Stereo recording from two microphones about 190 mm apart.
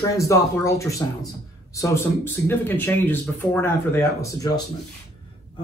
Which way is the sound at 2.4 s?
10° left (ahead or behind).